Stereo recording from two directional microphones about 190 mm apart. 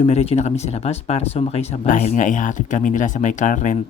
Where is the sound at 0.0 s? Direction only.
30° left (ahead or behind).